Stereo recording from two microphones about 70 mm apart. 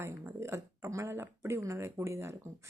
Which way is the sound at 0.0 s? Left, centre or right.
Right.